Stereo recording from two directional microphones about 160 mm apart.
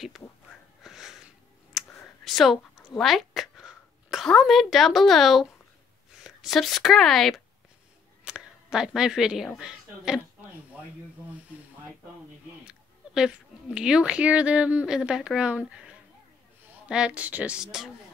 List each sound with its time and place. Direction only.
0.8 s a sound: centre (ahead or behind)
6.1 s speech: centre (ahead or behind)
12.6 s speech: 5° right (ahead or behind)
16.8 s a woman's voice: 5° right (ahead or behind)